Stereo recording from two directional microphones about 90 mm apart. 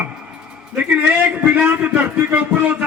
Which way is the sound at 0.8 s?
15° right (ahead or behind).